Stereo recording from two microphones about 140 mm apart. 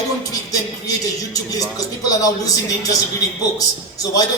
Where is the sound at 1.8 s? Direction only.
25° left (ahead or behind).